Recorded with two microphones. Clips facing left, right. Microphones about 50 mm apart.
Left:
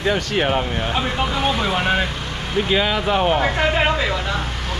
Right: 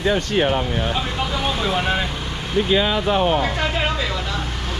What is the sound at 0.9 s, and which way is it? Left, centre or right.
Speech, centre.